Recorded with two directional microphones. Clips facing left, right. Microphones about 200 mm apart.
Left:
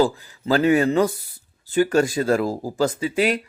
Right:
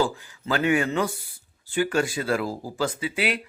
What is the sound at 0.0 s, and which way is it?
Speech, 35° left (ahead or behind).